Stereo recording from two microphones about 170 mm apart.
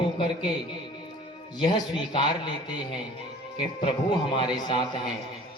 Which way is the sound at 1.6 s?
25° left (ahead or behind).